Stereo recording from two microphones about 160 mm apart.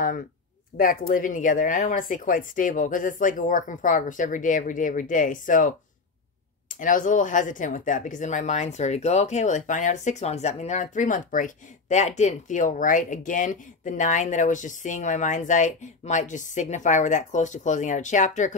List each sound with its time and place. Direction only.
0.7 s speech: 60° left (ahead or behind)